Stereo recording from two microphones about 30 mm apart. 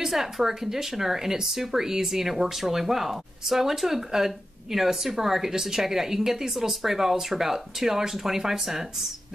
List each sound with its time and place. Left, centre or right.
0.0 s speech: centre